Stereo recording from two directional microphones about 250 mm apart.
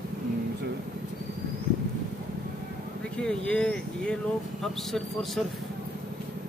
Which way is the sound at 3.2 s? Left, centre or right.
Centre.